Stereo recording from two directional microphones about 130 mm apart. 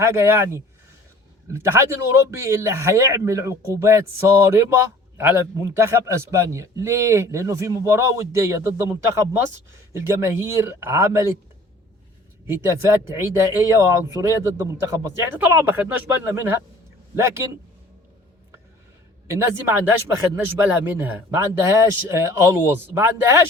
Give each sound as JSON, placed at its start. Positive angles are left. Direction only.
{"t": 0.0, "sound": "a man's voice", "side_deg": -20}
{"t": 12.6, "sound": "a man's voice", "side_deg": -20}
{"t": 19.3, "sound": "a man's voice", "side_deg": -20}